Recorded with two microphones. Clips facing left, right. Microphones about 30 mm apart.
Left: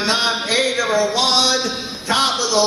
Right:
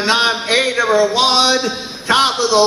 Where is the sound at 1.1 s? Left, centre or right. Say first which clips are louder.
Right 3 dB; right.